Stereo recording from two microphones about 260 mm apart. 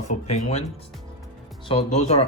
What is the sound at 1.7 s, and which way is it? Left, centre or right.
Speech, left.